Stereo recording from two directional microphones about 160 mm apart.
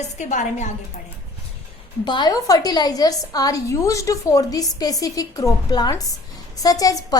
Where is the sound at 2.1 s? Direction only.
25° left (ahead or behind).